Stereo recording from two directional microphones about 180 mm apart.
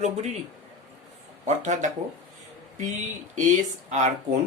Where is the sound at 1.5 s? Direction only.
40° right (ahead or behind).